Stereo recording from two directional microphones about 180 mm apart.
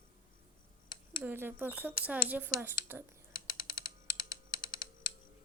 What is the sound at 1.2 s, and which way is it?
Speech, 10° right (ahead or behind).